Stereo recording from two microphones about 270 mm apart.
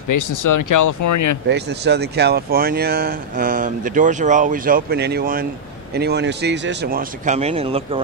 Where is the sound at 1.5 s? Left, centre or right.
Right.